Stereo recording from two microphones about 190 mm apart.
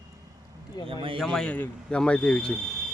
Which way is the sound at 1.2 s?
5° left (ahead or behind).